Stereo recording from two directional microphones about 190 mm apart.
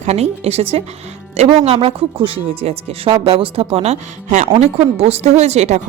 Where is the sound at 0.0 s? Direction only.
35° right (ahead or behind).